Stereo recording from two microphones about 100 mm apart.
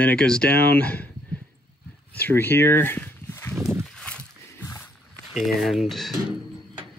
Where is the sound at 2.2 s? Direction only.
20° left (ahead or behind).